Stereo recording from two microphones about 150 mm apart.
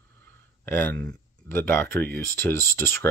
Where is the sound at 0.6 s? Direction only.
10° left (ahead or behind).